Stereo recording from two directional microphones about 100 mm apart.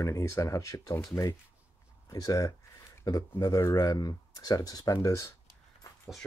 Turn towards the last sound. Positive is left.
turn(degrees=30)  # may be behind; listen again after turning